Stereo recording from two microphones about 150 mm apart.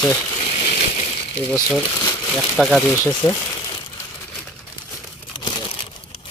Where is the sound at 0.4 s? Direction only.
45° left (ahead or behind).